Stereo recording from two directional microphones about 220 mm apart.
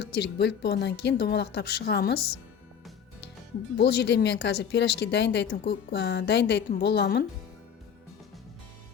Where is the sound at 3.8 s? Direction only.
50° left (ahead or behind).